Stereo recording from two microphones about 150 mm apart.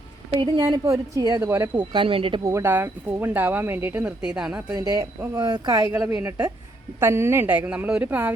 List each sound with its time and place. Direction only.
0.3 s a woman's voice: 25° right (ahead or behind)
1.9 s speech: 35° right (ahead or behind)
2.4 s speech: 20° right (ahead or behind)
4.4 s a woman's voice: 25° right (ahead or behind)